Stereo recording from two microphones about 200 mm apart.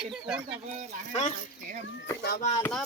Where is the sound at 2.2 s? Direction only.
50° left (ahead or behind).